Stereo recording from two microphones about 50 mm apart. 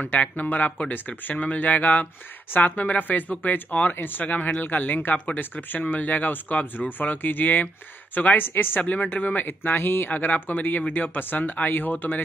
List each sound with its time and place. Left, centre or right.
0.0 s speech: left
10.1 s speech: left